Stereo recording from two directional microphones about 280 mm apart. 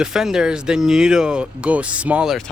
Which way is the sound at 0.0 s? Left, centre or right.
Centre.